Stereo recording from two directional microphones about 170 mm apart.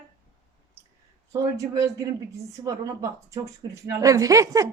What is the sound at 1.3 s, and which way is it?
Speech, 20° right (ahead or behind).